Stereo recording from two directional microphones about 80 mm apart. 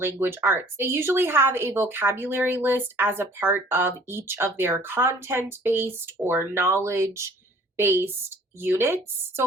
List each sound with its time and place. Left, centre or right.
0.0 s speech: right